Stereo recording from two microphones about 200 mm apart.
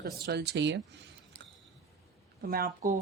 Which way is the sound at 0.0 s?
55° right (ahead or behind).